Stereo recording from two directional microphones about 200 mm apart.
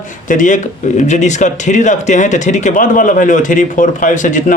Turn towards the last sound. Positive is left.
turn(degrees=40)  # may be behind; listen again after turning